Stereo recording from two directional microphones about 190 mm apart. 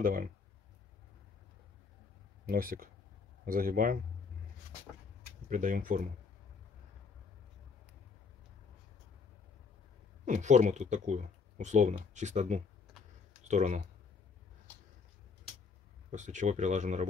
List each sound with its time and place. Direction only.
2.4 s speech: 50° right (ahead or behind)
5.5 s speech: 45° right (ahead or behind)
10.2 s speech: 40° right (ahead or behind)
14.7 s a sound: 10° left (ahead or behind)
16.1 s speech: 40° right (ahead or behind)